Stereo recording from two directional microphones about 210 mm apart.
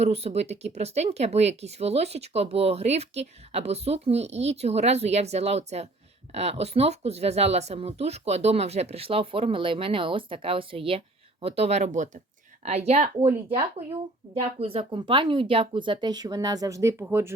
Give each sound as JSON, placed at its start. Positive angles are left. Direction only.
{"t": 0.0, "sound": "speech", "side_deg": -30}
{"t": 14.3, "sound": "speech", "side_deg": -30}